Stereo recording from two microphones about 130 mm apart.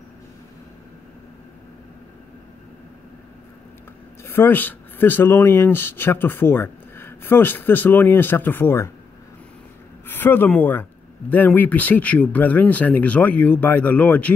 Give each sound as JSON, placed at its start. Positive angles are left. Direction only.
{"t": 4.2, "sound": "speech", "side_deg": 15}
{"t": 10.0, "sound": "speech", "side_deg": 15}